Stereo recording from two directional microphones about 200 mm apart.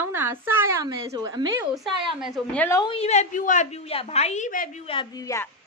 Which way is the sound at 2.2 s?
5° left (ahead or behind).